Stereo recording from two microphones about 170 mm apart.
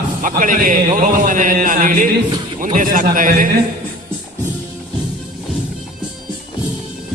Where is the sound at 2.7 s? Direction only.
50° right (ahead or behind).